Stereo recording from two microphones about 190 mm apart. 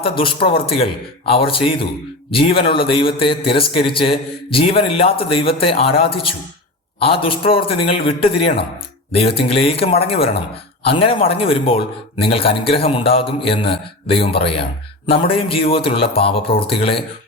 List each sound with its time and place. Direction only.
0.2 s a man's voice: 25° left (ahead or behind)